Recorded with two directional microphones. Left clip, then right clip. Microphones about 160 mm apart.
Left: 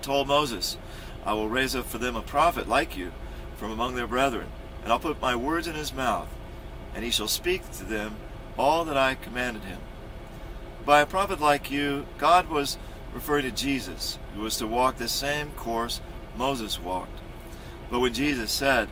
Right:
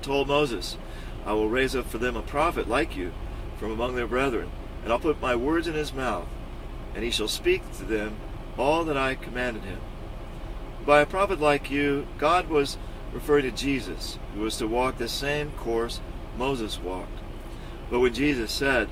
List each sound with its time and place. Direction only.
0.1 s speech: 20° left (ahead or behind)
10.8 s speech: 20° left (ahead or behind)
17.9 s speech: 20° left (ahead or behind)